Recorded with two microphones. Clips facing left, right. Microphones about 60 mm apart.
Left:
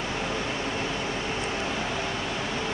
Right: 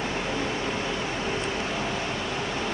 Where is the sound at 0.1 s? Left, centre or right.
Right.